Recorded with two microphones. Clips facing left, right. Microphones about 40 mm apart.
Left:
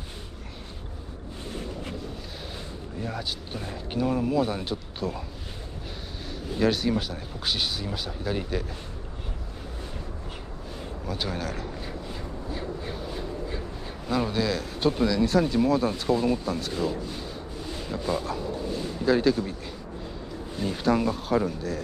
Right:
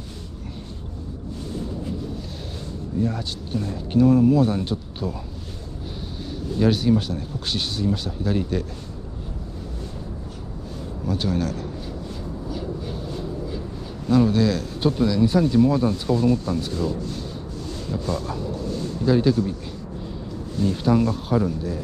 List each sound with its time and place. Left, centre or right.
1.5 s wind noise: left
3.0 s speech: centre
6.6 s speech: centre
11.1 s speech: centre
14.0 s speech: centre
18.7 s a sound: centre
19.0 s speech: centre
20.5 s speech: centre